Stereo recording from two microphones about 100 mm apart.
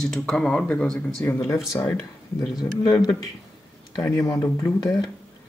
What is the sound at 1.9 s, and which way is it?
Speech, 40° left (ahead or behind).